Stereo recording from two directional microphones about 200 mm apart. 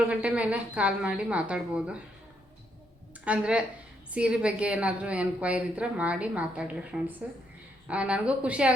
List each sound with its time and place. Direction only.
0.1 s a woman's voice: 5° right (ahead or behind)
3.2 s a woman's voice: 5° right (ahead or behind)